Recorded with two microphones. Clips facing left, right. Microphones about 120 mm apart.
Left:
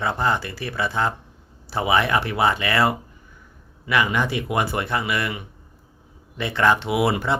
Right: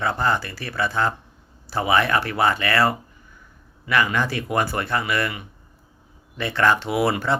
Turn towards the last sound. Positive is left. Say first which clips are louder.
# even
turn(degrees=15)  # may be behind; listen again after turning